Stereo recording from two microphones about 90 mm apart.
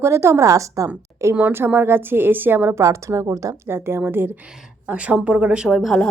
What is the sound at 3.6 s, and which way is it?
Speech, 25° right (ahead or behind).